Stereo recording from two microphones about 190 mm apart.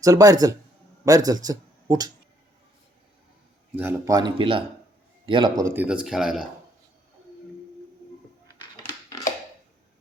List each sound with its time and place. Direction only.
0.0 s speech: 20° right (ahead or behind)
3.8 s speech: 10° right (ahead or behind)